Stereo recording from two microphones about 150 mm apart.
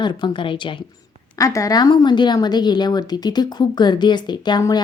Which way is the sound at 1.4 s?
20° left (ahead or behind).